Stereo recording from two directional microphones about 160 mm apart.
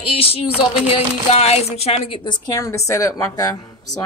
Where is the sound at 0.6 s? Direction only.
40° left (ahead or behind).